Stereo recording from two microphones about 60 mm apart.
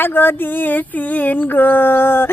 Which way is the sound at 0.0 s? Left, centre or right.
Left.